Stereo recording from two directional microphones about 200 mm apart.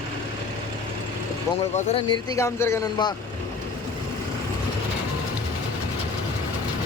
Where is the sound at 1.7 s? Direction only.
30° left (ahead or behind).